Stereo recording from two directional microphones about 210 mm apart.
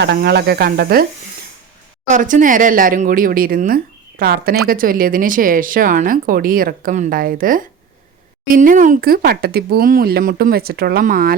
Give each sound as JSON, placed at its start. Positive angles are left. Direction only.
{"t": 0.0, "sound": "speech", "side_deg": -50}
{"t": 2.0, "sound": "speech", "side_deg": -35}